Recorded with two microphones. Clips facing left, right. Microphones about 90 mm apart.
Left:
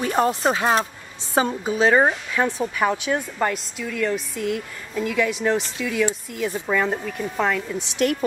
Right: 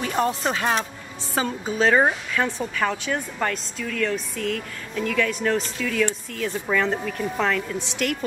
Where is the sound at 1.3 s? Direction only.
20° left (ahead or behind).